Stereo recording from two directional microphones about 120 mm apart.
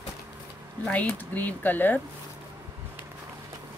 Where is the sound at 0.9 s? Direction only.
15° left (ahead or behind).